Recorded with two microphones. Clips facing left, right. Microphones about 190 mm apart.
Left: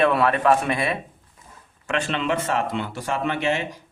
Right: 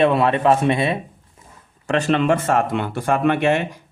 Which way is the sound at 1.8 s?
40° right (ahead or behind).